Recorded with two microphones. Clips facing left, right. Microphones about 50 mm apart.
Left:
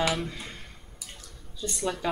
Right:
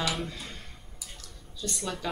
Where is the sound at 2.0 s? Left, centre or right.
Centre.